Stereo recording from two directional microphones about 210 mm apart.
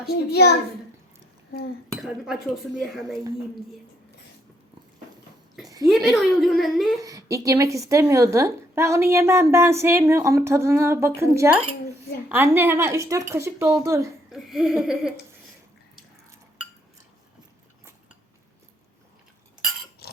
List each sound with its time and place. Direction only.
0.3 s a child's voice: 50° left (ahead or behind)
2.0 s cutlery: centre (ahead or behind)
5.8 s cutlery: centre (ahead or behind)
7.0 s a woman's voice: 15° right (ahead or behind)
14.3 s cutlery: centre (ahead or behind)